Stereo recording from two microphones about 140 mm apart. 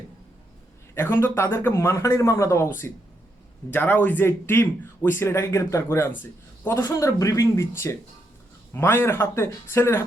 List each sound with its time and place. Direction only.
0.9 s a man's voice: 20° left (ahead or behind)